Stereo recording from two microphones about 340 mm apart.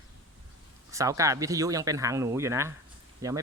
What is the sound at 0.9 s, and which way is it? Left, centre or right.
Speech, centre.